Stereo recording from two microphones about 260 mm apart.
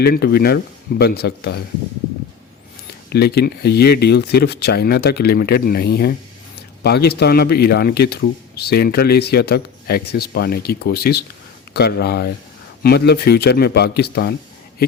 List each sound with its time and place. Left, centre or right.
0.0 s speech: left
3.1 s speech: left